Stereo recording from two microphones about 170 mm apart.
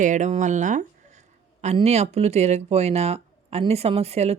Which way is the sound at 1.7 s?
40° right (ahead or behind).